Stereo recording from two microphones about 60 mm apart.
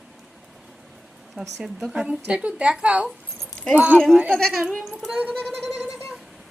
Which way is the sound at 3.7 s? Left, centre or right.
Right.